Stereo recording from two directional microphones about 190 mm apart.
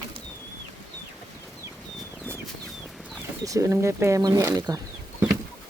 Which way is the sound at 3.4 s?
15° right (ahead or behind).